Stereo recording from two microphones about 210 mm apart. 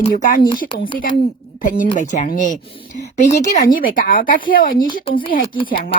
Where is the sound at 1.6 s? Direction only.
40° left (ahead or behind).